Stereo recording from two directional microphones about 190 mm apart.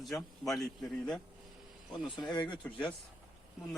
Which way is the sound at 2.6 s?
5° left (ahead or behind).